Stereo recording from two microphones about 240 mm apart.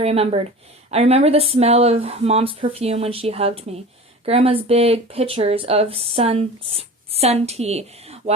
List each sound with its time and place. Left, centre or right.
0.0 s speech: right